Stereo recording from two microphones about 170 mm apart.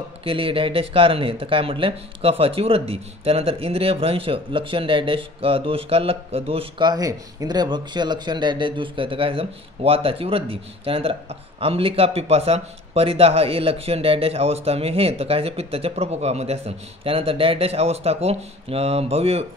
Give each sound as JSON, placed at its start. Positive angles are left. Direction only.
{"t": 0.2, "sound": "a man's voice", "side_deg": -30}